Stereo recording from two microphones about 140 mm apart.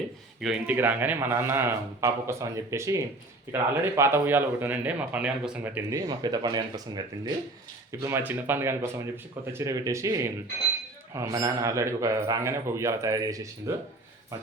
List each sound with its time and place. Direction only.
0.4 s speech: 5° right (ahead or behind)
0.8 s speech: 15° right (ahead or behind)
6.1 s a man's voice: 30° right (ahead or behind)
8.0 s a man's voice: 15° right (ahead or behind)